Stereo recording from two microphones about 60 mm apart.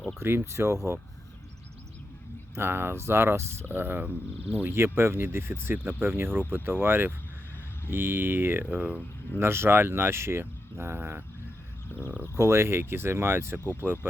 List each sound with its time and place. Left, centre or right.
0.2 s speech: right
2.6 s speech: right
4.7 s speech: right
9.4 s speech: right
12.4 s speech: right